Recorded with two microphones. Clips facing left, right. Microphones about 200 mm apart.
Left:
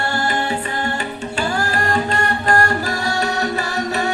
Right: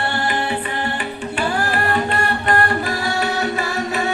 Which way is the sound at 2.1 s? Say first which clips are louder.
Left 1 dB; 35° left (ahead or behind).